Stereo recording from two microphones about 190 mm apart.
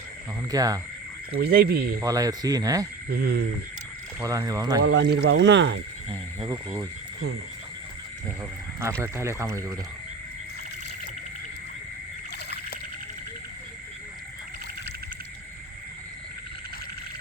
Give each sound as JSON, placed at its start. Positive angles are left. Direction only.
{"t": 0.5, "sound": "speech", "side_deg": -20}
{"t": 1.3, "sound": "speech", "side_deg": -55}
{"t": 2.0, "sound": "speech", "side_deg": -20}
{"t": 3.1, "sound": "speech", "side_deg": -55}
{"t": 4.2, "sound": "speech", "side_deg": -15}
{"t": 4.8, "sound": "speech", "side_deg": -65}
{"t": 6.4, "sound": "speech", "side_deg": -20}
{"t": 9.0, "sound": "speech", "side_deg": -15}